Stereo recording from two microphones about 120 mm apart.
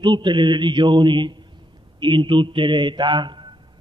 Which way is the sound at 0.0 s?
40° right (ahead or behind).